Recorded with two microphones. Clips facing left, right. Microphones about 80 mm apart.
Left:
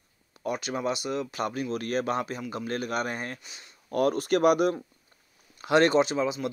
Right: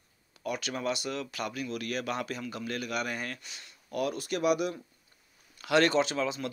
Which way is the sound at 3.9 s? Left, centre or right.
Left.